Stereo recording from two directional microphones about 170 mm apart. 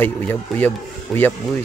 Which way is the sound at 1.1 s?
Centre (ahead or behind).